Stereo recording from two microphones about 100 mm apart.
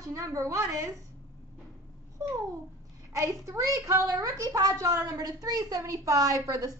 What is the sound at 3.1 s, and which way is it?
A woman's voice, 30° right (ahead or behind).